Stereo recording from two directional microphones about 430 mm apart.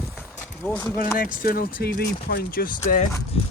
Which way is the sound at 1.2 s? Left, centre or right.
Centre.